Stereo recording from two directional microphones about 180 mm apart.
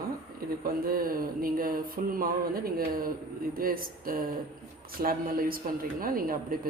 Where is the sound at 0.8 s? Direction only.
55° right (ahead or behind).